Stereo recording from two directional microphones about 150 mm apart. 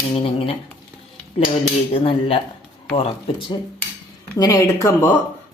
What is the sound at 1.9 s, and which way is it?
Speech, 40° left (ahead or behind).